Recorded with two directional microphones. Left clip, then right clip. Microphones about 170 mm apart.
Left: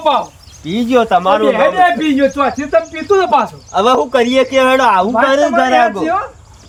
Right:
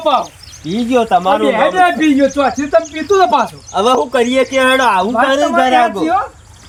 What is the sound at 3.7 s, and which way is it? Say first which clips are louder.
Speech: left 1 dB; 20° right (ahead or behind).